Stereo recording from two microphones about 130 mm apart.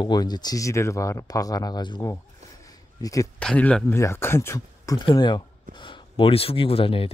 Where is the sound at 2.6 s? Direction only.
25° left (ahead or behind).